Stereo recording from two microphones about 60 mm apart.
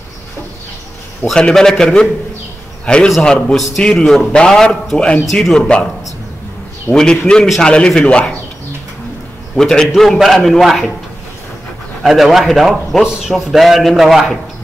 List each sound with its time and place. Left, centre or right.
1.2 s a man's voice: centre
5.3 s a man's voice: centre
7.0 s a man's voice: centre
9.6 s a man's voice: centre
12.0 s a man's voice: centre